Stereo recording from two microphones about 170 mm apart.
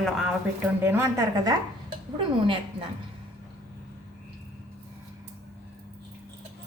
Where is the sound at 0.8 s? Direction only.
15° right (ahead or behind).